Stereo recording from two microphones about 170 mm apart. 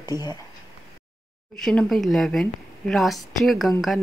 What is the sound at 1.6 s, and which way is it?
Speech, centre (ahead or behind).